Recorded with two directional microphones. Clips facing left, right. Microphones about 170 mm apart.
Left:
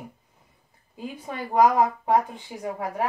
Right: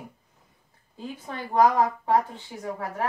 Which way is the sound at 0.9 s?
10° left (ahead or behind).